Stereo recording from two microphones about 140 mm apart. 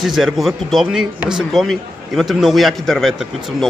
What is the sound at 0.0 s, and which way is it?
A man's voice, centre (ahead or behind).